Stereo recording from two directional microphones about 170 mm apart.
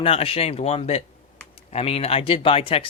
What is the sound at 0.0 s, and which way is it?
Speech, 35° left (ahead or behind).